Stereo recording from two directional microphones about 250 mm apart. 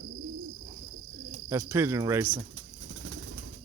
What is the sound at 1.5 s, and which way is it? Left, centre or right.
Speech, centre.